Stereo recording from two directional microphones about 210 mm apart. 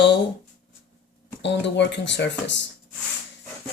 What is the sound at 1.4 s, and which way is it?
Speech, 55° left (ahead or behind).